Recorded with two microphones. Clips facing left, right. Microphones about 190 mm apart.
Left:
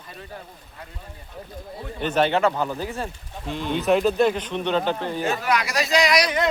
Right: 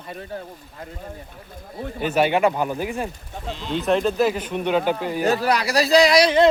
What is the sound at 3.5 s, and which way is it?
Speech, 55° left (ahead or behind).